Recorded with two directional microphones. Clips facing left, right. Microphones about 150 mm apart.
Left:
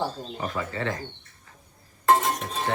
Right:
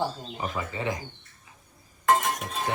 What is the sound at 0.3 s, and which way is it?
Speech, 15° right (ahead or behind).